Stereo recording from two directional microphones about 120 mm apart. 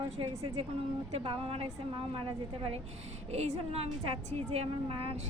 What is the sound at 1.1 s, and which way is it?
A woman's voice, 55° right (ahead or behind).